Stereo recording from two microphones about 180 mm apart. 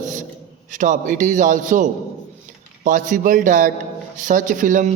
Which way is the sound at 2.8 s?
45° right (ahead or behind).